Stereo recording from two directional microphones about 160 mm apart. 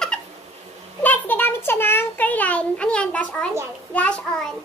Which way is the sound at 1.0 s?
10° left (ahead or behind).